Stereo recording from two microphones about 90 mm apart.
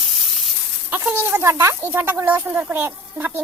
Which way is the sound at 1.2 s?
25° right (ahead or behind).